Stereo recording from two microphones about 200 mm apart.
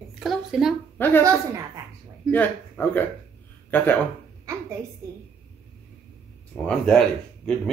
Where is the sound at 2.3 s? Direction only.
10° left (ahead or behind).